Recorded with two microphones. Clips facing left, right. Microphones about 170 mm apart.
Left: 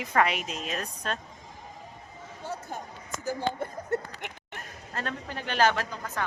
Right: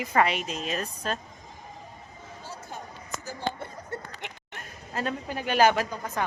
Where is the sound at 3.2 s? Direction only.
50° left (ahead or behind).